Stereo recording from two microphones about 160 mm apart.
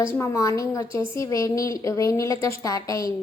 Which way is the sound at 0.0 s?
20° left (ahead or behind).